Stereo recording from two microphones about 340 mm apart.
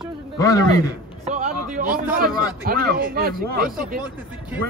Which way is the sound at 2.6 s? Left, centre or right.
Right.